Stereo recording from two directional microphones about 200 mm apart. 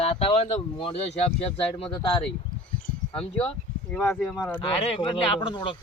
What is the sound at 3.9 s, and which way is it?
Speech, 10° left (ahead or behind).